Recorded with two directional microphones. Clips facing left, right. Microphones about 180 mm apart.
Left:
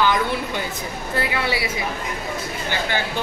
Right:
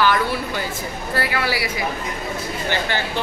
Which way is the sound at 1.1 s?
25° left (ahead or behind).